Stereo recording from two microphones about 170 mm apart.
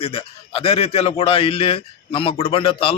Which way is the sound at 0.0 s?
35° left (ahead or behind).